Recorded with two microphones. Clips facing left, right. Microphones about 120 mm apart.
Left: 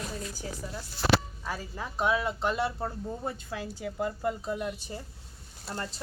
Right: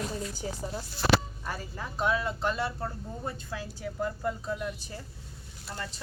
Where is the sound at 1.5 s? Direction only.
10° left (ahead or behind).